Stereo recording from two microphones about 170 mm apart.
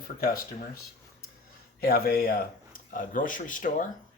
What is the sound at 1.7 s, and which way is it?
A man's voice, 60° left (ahead or behind).